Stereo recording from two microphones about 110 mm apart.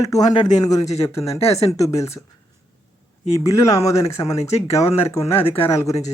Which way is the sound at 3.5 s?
30° left (ahead or behind).